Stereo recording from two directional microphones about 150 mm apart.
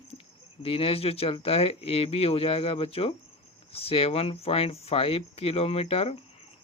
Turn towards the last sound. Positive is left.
turn(degrees=40)  # may be behind; listen again after turning